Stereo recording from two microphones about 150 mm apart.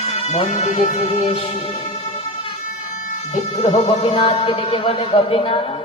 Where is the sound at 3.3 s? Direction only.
40° left (ahead or behind).